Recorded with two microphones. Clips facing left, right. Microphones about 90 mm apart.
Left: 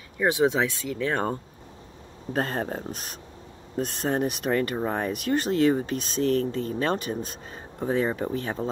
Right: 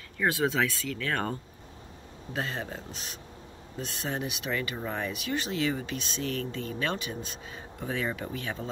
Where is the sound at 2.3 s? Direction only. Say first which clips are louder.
Left 7 dB; 45° left (ahead or behind).